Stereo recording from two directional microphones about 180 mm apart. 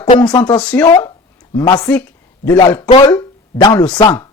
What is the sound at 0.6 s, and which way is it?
Speech, 5° left (ahead or behind).